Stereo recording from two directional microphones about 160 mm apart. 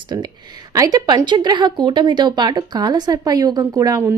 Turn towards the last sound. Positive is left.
turn(degrees=-20)  # may be behind; listen again after turning